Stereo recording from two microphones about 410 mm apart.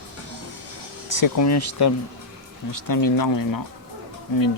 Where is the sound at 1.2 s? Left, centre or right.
Left.